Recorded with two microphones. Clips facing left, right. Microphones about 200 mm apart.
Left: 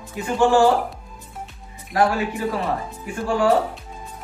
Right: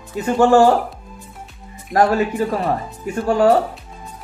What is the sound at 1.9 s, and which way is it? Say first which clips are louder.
Speech: right 4 dB; 40° right (ahead or behind).